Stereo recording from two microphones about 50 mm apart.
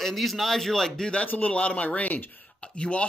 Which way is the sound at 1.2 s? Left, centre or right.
Left.